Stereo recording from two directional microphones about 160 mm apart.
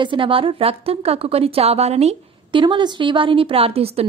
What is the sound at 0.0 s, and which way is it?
A woman's voice, 30° right (ahead or behind).